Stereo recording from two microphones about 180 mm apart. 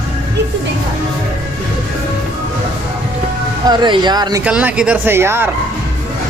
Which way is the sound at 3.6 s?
25° right (ahead or behind).